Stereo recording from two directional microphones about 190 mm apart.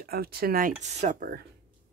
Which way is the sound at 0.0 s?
55° right (ahead or behind).